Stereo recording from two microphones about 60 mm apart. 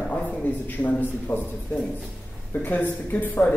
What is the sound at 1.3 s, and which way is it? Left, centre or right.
Speech, left.